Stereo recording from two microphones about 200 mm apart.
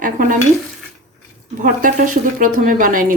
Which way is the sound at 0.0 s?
40° right (ahead or behind).